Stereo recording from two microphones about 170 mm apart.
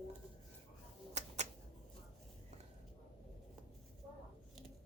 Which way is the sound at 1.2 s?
40° right (ahead or behind).